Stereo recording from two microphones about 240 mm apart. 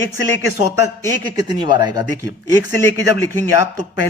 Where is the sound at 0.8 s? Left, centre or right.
Centre.